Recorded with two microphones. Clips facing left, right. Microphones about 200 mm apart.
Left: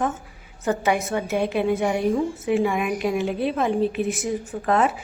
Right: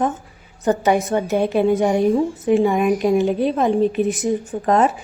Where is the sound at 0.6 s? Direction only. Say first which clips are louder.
Right 5 dB; 35° right (ahead or behind).